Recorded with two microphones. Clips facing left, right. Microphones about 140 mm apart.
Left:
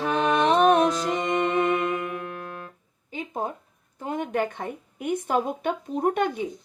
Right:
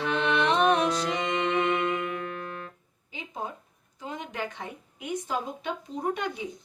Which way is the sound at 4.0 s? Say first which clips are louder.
Left 8 dB; 55° left (ahead or behind).